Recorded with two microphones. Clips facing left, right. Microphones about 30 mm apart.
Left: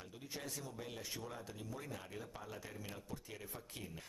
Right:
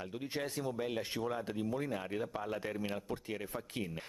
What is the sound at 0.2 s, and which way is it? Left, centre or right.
Speech, right.